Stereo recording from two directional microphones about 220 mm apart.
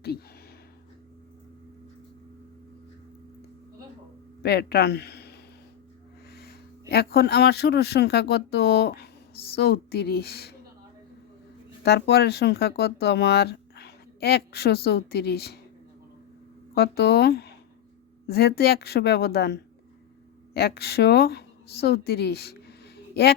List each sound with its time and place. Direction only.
4.4 s speech: 45° left (ahead or behind)
11.8 s speech: 50° left (ahead or behind)
16.7 s speech: 45° left (ahead or behind)